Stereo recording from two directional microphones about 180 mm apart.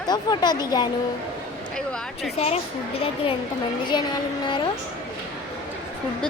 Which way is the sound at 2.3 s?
35° left (ahead or behind).